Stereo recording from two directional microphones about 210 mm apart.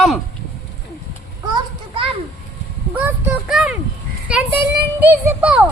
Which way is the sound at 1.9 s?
25° right (ahead or behind).